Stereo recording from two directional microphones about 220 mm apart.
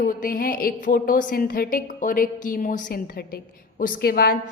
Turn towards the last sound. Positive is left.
turn(degrees=40)  # may be behind; listen again after turning